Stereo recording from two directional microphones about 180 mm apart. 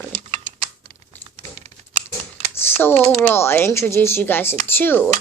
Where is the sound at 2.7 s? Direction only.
10° left (ahead or behind).